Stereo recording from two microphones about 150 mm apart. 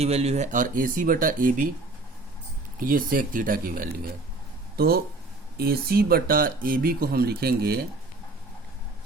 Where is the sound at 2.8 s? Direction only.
65° right (ahead or behind).